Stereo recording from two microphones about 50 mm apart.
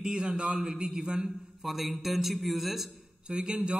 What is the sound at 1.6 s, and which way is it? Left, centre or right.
A man's voice, centre.